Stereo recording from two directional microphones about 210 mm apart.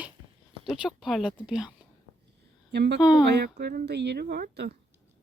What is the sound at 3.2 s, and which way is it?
A woman's voice, 50° right (ahead or behind).